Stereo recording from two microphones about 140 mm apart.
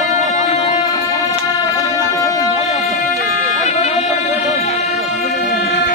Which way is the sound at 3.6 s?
50° left (ahead or behind).